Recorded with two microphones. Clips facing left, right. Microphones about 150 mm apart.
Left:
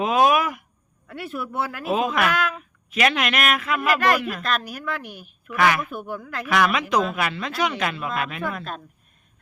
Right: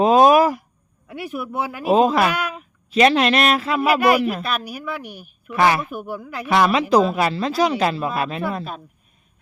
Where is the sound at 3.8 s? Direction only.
10° right (ahead or behind).